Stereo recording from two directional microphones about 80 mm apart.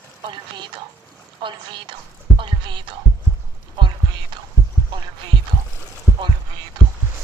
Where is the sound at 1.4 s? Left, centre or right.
Right.